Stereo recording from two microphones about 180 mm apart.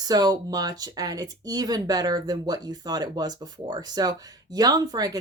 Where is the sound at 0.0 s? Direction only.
20° right (ahead or behind).